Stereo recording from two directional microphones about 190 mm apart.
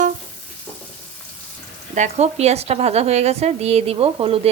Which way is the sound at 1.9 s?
40° right (ahead or behind).